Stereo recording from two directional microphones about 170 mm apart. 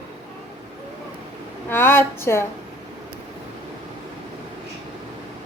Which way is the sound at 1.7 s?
15° left (ahead or behind).